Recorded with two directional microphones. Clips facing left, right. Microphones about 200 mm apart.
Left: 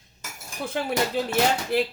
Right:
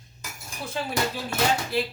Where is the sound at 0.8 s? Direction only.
65° left (ahead or behind).